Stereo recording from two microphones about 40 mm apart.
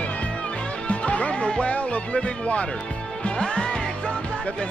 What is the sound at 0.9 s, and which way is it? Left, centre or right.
Speech, left.